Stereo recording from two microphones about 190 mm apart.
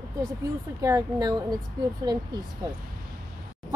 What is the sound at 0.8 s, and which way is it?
A woman's voice, 20° right (ahead or behind).